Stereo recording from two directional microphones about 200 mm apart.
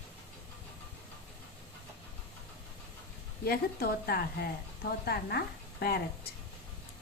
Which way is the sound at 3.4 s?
50° left (ahead or behind).